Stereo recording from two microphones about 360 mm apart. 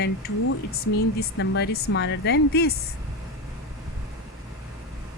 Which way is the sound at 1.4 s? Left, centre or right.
Left.